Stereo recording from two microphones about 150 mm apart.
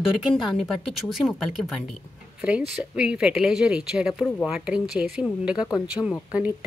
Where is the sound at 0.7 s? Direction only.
Centre (ahead or behind).